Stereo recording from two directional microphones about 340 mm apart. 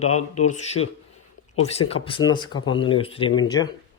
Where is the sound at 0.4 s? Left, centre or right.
Centre.